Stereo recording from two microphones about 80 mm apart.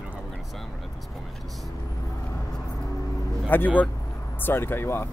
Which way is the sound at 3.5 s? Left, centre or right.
Left.